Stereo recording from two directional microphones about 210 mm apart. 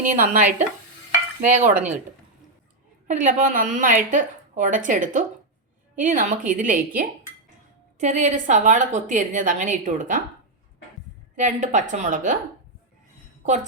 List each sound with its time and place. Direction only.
0.2 s a woman's voice: 35° right (ahead or behind)
3.1 s a woman's voice: 35° right (ahead or behind)
11.3 s a woman's voice: 35° right (ahead or behind)